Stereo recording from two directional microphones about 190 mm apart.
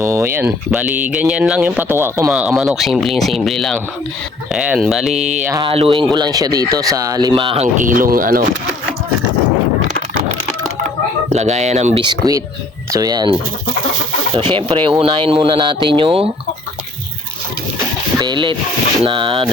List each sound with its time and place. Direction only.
0.0 s speech: 15° right (ahead or behind)
2.3 s speech: centre (ahead or behind)
5.1 s speech: 35° right (ahead or behind)
11.3 s speech: 35° right (ahead or behind)
12.0 s speech: 20° right (ahead or behind)
14.5 s speech: 30° right (ahead or behind)
18.2 s speech: 25° right (ahead or behind)